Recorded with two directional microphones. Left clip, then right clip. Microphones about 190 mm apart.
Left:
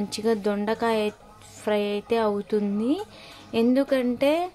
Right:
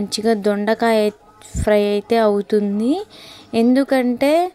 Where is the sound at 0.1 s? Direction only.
25° right (ahead or behind).